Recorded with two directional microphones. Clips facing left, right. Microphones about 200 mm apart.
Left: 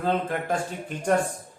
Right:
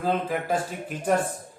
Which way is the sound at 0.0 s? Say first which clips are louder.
Even; 5° right (ahead or behind).